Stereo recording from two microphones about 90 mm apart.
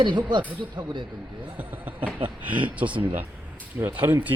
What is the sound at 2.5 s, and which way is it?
Speech, 15° right (ahead or behind).